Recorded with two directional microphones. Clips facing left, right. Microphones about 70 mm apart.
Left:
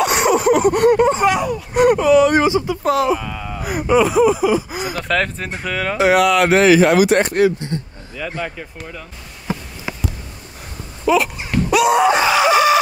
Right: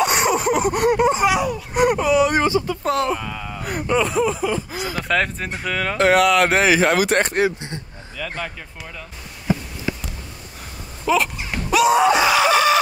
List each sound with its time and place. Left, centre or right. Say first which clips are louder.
0.0 s a sound: left 3 dB; centre
2.4 s speech: left 3 dB; centre
2.8 s speech: left 4 dB; centre
5.0 s speech: even; centre
6.8 s speech: left 4 dB; right
7.3 s speech: left 5 dB; right
8.2 s speech: left 3 dB; centre
11.1 s speech: left 3 dB; centre
11.5 s wail: left 2 dB; centre
12.4 s chicken: left 3 dB; centre